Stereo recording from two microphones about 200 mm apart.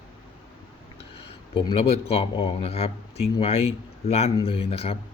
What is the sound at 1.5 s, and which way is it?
Speech, 25° left (ahead or behind).